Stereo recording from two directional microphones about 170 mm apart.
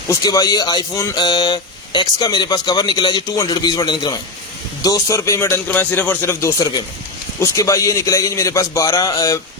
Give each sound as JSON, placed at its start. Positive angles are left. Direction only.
{"t": 0.1, "sound": "a man's voice", "side_deg": 20}